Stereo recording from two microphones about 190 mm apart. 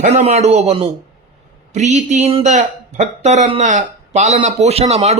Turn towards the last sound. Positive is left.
turn(degrees=-35)  # may be behind; listen again after turning